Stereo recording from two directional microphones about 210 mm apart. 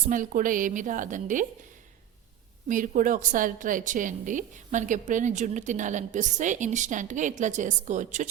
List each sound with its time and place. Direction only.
0.1 s a woman's voice: 40° right (ahead or behind)
2.6 s a woman's voice: 40° right (ahead or behind)